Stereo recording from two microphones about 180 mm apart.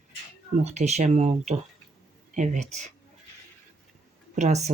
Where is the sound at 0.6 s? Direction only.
40° right (ahead or behind).